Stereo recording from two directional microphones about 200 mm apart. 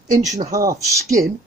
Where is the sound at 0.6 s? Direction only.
15° right (ahead or behind).